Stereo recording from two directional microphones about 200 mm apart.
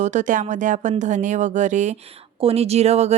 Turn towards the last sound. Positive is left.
turn(degrees=-35)  # may be behind; listen again after turning